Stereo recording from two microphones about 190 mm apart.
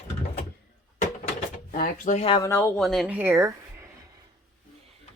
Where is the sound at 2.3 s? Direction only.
25° left (ahead or behind).